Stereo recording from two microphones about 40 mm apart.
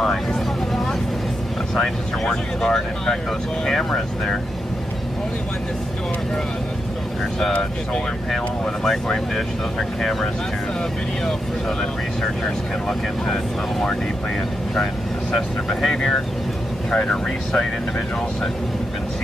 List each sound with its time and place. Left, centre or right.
0.0 s speech: centre
1.8 s speech: centre
8.8 s speech: centre
12.2 s speech: centre
15.9 s speech: centre